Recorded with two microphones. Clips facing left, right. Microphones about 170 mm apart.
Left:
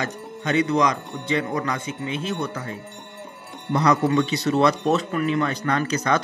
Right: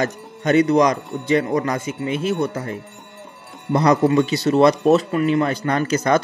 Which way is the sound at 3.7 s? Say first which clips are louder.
Right 4 dB; 35° right (ahead or behind).